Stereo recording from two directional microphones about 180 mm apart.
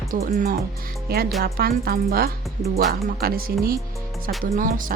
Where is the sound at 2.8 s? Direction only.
55° right (ahead or behind).